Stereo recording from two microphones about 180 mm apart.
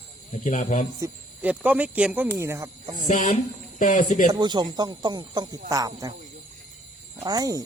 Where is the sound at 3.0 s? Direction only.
45° left (ahead or behind).